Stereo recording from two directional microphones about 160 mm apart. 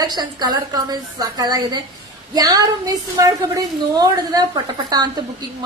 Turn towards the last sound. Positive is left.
turn(degrees=-25)  # may be behind; listen again after turning